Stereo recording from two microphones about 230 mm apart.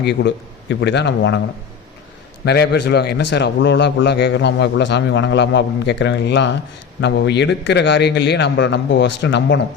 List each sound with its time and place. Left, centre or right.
0.0 s a man's voice: left
2.4 s a man's voice: left